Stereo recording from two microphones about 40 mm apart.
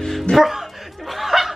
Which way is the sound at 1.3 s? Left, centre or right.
Centre.